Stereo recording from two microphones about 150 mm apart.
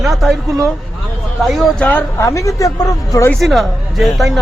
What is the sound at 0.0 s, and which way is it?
Speech, centre (ahead or behind).